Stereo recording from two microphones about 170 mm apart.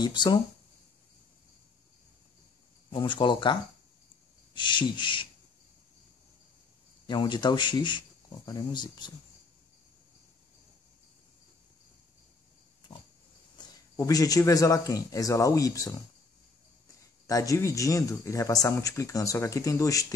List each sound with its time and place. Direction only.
0.0 s speech: 25° left (ahead or behind)
2.9 s speech: 30° left (ahead or behind)
4.6 s speech: 30° left (ahead or behind)
7.1 s speech: 25° left (ahead or behind)
13.6 s speech: 20° left (ahead or behind)
17.3 s speech: 20° left (ahead or behind)